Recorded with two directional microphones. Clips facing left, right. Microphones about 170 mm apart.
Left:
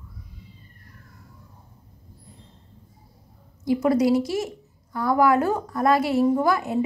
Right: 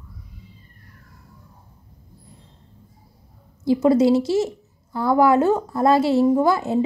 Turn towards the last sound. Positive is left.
turn(degrees=-25)  # may be behind; listen again after turning